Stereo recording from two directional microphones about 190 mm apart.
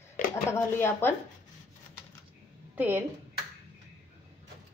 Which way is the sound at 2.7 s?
10° right (ahead or behind).